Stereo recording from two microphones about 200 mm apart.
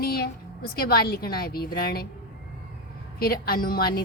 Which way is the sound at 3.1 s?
50° left (ahead or behind).